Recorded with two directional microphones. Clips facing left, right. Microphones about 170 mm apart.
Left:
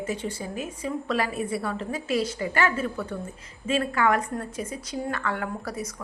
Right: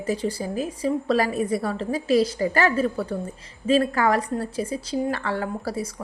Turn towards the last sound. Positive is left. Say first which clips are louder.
# right 4 dB
turn(degrees=-30)  # may be behind; listen again after turning